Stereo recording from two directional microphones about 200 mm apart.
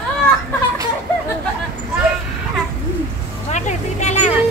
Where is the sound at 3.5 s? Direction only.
35° left (ahead or behind).